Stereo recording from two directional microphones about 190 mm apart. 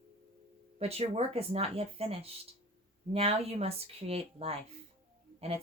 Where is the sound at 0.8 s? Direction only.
30° right (ahead or behind).